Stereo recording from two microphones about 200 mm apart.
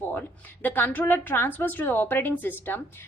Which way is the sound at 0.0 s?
10° left (ahead or behind).